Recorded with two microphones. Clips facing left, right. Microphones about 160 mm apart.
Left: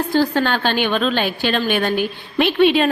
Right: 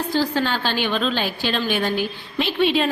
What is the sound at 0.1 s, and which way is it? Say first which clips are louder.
A woman's voice: left 4 dB; 55° left (ahead or behind).